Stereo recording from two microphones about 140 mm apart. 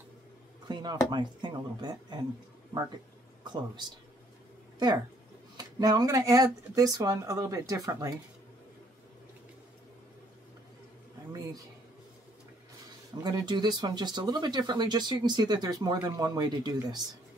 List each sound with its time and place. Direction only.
0.7 s a sound: 30° right (ahead or behind)
1.1 s speech: 30° right (ahead or behind)
3.4 s speech: 30° right (ahead or behind)
13.2 s speech: 30° right (ahead or behind)